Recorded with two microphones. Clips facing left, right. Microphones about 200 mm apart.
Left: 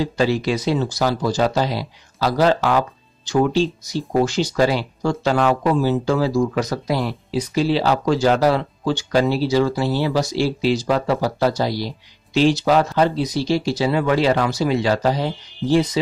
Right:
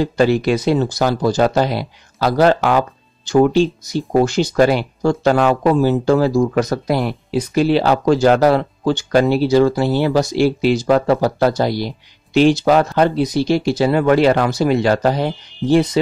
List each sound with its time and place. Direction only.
0.0 s speech: 55° right (ahead or behind)